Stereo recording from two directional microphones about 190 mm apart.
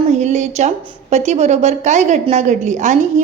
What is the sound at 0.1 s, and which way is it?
A woman's voice, 35° right (ahead or behind).